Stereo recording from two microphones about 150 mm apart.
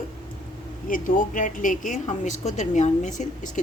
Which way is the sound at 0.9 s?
65° left (ahead or behind).